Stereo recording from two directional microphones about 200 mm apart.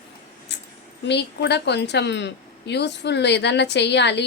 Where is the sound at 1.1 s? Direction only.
60° left (ahead or behind).